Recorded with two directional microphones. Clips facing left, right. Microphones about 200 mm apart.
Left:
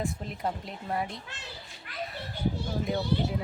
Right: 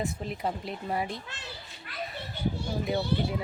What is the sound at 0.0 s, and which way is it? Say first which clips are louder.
Speech: right 1 dB; 5° right (ahead or behind).